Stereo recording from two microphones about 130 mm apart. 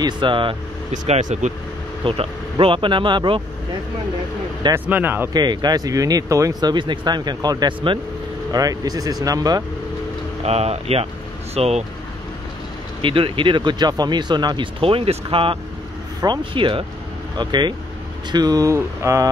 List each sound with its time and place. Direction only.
0.0 s speech: 40° right (ahead or behind)
0.9 s speech: 60° right (ahead or behind)
2.0 s speech: 45° right (ahead or behind)
4.7 s speech: 15° right (ahead or behind)
5.3 s speech: 35° right (ahead or behind)
10.4 s speech: 55° right (ahead or behind)
13.0 s speech: 40° right (ahead or behind); by 19.2 s 20° right (ahead or behind)